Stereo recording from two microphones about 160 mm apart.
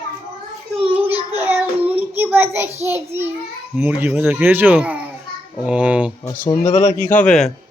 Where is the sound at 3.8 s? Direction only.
10° right (ahead or behind).